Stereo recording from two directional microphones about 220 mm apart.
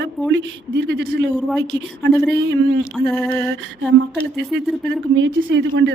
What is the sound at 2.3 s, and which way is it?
Speech, 55° right (ahead or behind).